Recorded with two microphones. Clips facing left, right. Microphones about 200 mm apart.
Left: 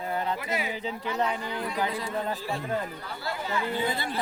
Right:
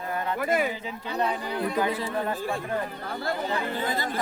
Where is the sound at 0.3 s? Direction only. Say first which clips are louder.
Right 7 dB; 50° right (ahead or behind).